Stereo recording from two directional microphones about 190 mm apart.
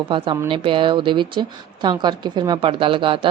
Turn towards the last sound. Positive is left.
turn(degrees=-25)  # may be behind; listen again after turning